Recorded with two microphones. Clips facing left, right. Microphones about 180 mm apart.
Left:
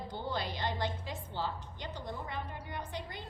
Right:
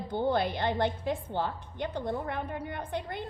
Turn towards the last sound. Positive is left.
turn(degrees=-55)  # may be behind; listen again after turning